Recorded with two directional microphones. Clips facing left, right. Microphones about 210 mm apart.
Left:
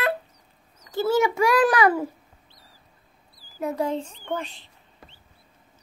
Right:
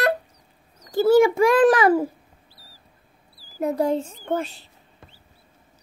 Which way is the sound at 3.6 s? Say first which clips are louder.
Right 4 dB; 40° right (ahead or behind).